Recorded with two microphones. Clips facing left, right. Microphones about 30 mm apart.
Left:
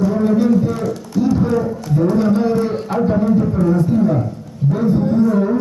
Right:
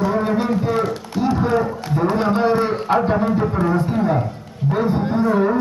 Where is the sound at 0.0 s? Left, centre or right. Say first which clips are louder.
Left 4 dB; right.